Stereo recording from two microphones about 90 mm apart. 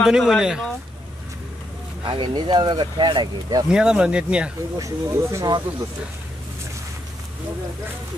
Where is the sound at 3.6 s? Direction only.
10° right (ahead or behind).